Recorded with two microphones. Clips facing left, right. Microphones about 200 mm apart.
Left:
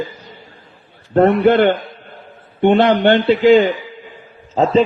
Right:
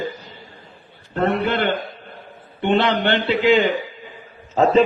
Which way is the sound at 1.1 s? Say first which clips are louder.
Left 9 dB; 55° left (ahead or behind).